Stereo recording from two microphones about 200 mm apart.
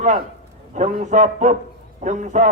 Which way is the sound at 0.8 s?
35° right (ahead or behind).